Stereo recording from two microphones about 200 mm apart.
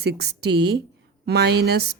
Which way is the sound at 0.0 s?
55° right (ahead or behind).